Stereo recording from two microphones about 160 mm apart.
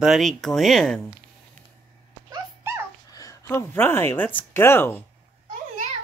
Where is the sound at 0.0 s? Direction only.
Centre (ahead or behind).